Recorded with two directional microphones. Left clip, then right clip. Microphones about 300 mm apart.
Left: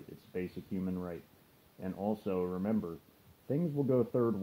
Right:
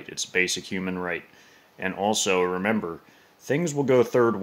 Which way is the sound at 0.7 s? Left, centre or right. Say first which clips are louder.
Right 12 dB; right.